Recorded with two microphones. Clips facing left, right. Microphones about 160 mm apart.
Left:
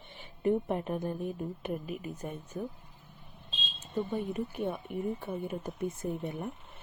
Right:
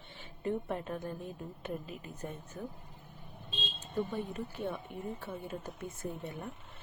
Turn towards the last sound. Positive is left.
turn(degrees=15)  # may be behind; listen again after turning